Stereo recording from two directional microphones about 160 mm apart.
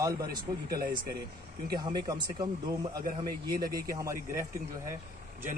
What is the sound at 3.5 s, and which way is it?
Speech, 65° right (ahead or behind).